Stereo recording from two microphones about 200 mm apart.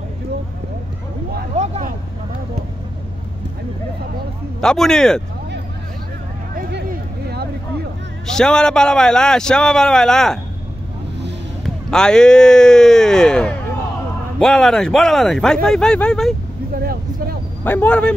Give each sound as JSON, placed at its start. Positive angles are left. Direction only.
{"t": 1.5, "sound": "vehicle", "side_deg": -35}
{"t": 4.6, "sound": "a man's voice", "side_deg": 0}
{"t": 6.5, "sound": "a sound", "side_deg": -45}
{"t": 8.3, "sound": "a man's voice", "side_deg": 5}
{"t": 11.6, "sound": "a man's voice", "side_deg": 5}
{"t": 16.7, "sound": "vehicle", "side_deg": -50}
{"t": 17.6, "sound": "speech", "side_deg": 10}